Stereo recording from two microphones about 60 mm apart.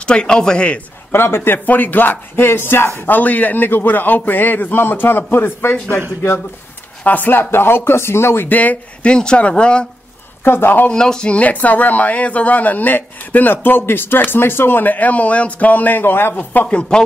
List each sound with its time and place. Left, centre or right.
0.0 s speech: centre
1.1 s a man's voice: left
3.1 s a man's voice: left
7.0 s a man's voice: left
8.5 s speech: left
9.1 s speech: centre
10.4 s a man's voice: left
10.9 s speech: centre; by 16.3 s left
16.6 s speech: centre